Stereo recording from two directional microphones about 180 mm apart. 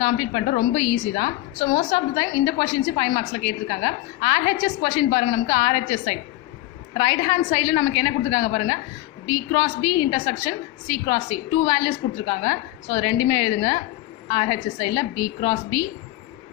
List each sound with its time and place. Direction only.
0.0 s a woman's voice: 30° left (ahead or behind)